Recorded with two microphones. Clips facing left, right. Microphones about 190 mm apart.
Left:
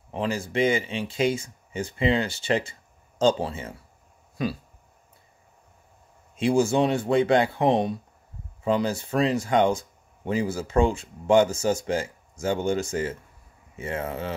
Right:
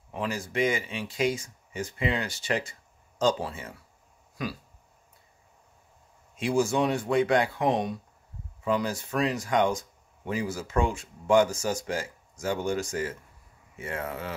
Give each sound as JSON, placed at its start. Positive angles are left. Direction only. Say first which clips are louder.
{"t": 0.1, "sound": "speech", "louder": "left 4 dB", "side_deg": 25}
{"t": 6.3, "sound": "speech", "louder": "left 4 dB", "side_deg": 25}